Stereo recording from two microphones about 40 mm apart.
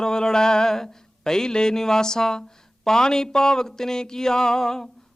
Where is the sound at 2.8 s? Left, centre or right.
Centre.